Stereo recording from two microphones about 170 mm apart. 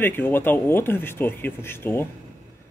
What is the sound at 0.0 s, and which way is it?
Speech, 10° left (ahead or behind).